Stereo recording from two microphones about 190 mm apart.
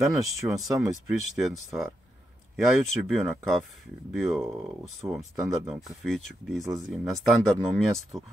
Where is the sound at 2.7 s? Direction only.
Centre (ahead or behind).